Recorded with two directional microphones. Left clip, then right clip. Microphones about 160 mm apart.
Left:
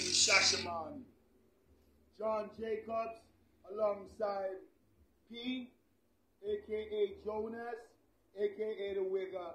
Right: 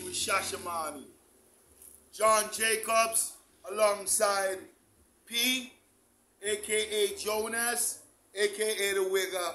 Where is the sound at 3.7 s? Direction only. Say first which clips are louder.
Right 8 dB; 35° right (ahead or behind).